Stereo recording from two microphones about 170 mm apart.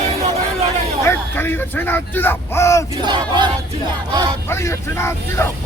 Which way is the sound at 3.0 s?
25° right (ahead or behind).